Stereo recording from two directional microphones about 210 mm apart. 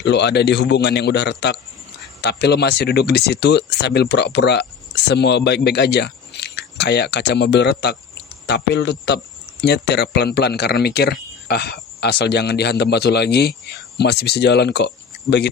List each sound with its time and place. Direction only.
0.0 s speech: 55° left (ahead or behind)